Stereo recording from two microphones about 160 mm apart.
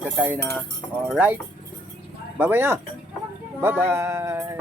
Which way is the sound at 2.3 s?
10° right (ahead or behind).